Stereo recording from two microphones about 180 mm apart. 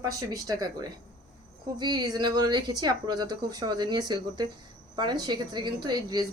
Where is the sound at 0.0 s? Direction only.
20° right (ahead or behind).